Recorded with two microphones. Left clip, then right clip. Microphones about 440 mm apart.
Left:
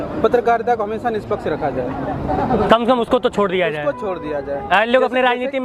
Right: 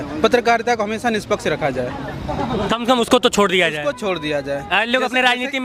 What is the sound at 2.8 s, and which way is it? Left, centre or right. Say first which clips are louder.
Speech: right 1 dB; right.